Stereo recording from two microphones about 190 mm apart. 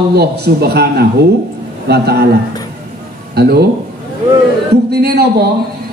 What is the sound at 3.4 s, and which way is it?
Speech, 55° right (ahead or behind).